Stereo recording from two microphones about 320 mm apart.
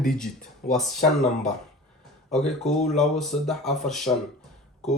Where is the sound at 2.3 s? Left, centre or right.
Centre.